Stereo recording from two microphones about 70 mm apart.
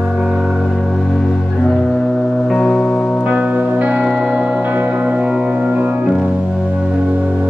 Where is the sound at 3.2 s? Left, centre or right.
Right.